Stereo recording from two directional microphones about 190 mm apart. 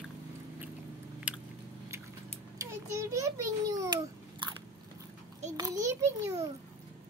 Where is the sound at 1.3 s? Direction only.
5° right (ahead or behind).